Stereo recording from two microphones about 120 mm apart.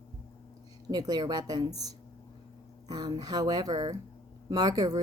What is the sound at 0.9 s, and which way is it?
Speech, 35° right (ahead or behind).